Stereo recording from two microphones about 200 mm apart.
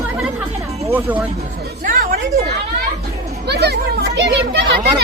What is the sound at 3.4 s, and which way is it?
A child's voice, 55° right (ahead or behind).